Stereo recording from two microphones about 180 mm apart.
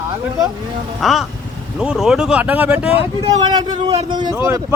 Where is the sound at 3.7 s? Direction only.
35° right (ahead or behind).